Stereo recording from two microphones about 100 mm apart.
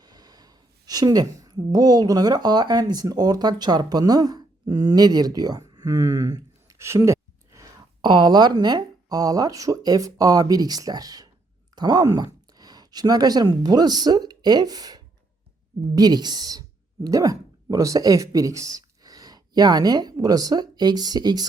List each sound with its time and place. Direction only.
0.0 s speech: 40° right (ahead or behind)
6.7 s a sound: 25° right (ahead or behind)
8.0 s speech: 50° right (ahead or behind)